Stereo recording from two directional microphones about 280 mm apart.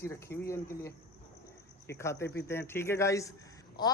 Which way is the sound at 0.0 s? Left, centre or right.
Centre.